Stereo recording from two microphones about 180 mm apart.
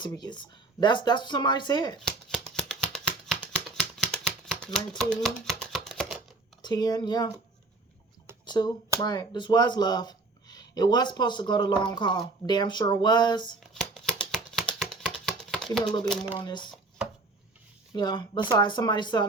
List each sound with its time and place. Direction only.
0.0 s speech: 25° left (ahead or behind)
2.0 s shuffling cards: 5° left (ahead or behind)
2.6 s a sound: 5° left (ahead or behind)
3.4 s typewriter: 5° left (ahead or behind)
6.6 s speech: 20° left (ahead or behind)
8.4 s speech: 25° left (ahead or behind)
13.7 s shuffling cards: centre (ahead or behind)
14.8 s a sound: 5° left (ahead or behind)
17.9 s speech: 25° left (ahead or behind)